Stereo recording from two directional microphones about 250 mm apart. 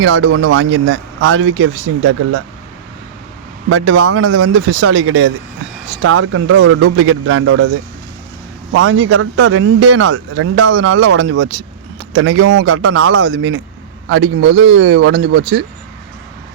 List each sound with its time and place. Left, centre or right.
0.0 s a man's voice: right
3.7 s a man's voice: right
6.6 s speech: right
6.9 s a man's voice: right
8.7 s a man's voice: right